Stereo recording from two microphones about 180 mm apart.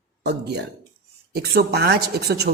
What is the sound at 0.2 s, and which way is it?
A woman's voice, 65° right (ahead or behind).